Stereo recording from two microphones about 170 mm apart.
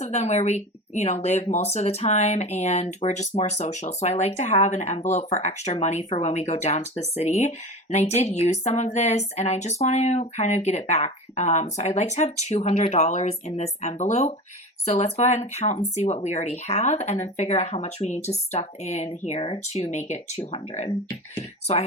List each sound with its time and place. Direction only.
0.0 s speech: 40° left (ahead or behind)